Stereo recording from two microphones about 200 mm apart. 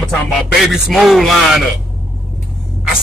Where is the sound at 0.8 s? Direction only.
Centre (ahead or behind).